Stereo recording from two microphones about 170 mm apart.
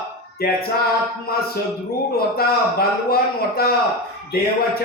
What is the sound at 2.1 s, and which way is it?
Speech, 65° left (ahead or behind).